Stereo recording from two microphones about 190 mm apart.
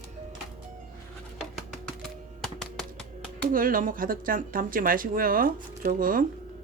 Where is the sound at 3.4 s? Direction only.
50° right (ahead or behind).